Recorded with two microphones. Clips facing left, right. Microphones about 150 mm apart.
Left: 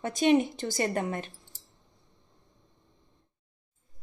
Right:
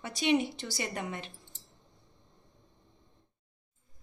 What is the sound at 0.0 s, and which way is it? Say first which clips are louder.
A woman's voice: left 5 dB; 50° left (ahead or behind).